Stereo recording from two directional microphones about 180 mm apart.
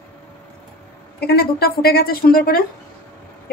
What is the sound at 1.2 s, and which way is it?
A woman's voice, 60° left (ahead or behind).